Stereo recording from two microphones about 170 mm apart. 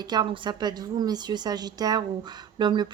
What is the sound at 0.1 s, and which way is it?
Speech, 25° right (ahead or behind).